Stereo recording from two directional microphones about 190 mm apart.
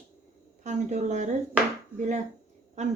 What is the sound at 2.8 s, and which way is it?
Speech, 35° right (ahead or behind).